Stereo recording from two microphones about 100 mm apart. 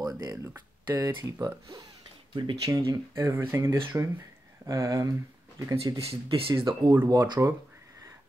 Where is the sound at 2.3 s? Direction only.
55° right (ahead or behind).